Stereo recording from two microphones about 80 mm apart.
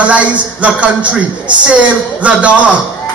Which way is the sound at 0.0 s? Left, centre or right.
Centre.